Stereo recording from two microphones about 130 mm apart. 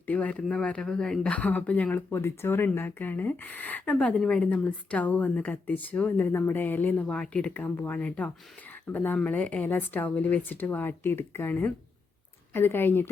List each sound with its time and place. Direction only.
0.0 s speech: 10° left (ahead or behind)